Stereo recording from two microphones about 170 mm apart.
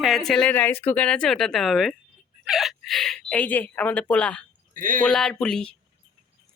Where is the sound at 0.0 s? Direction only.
Centre (ahead or behind).